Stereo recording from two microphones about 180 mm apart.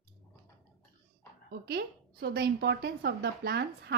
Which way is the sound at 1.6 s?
60° right (ahead or behind).